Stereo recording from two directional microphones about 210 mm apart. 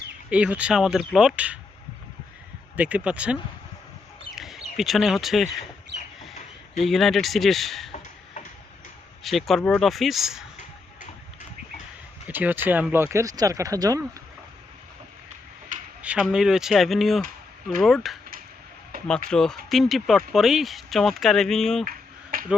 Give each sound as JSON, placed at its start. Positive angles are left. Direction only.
{"t": 0.3, "sound": "speech", "side_deg": -5}
{"t": 2.7, "sound": "speech", "side_deg": -5}
{"t": 4.4, "sound": "speech", "side_deg": 0}
{"t": 6.8, "sound": "speech", "side_deg": 0}
{"t": 9.2, "sound": "speech", "side_deg": 0}
{"t": 12.3, "sound": "speech", "side_deg": -10}
{"t": 16.0, "sound": "speech", "side_deg": -5}
{"t": 19.3, "sound": "speech", "side_deg": 0}
{"t": 21.8, "sound": "finger snapping", "side_deg": -40}